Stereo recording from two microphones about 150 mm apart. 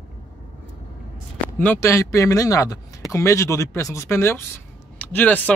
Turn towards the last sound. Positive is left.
turn(degrees=10)  # may be behind; listen again after turning